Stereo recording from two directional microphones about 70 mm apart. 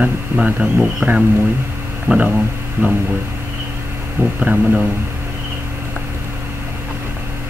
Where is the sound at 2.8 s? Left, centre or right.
Right.